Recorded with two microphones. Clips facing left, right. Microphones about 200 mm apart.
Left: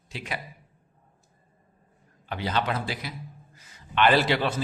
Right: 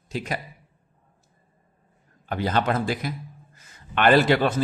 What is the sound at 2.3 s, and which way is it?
A man's voice, 50° right (ahead or behind).